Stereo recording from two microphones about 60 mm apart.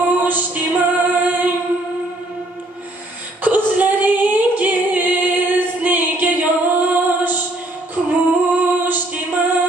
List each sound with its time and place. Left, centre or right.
0.0 s a capella: right
3.4 s female singing: right
8.5 s a capella: right